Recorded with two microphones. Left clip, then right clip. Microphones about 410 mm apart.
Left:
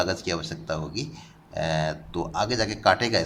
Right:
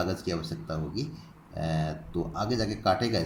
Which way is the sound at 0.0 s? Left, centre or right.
Centre.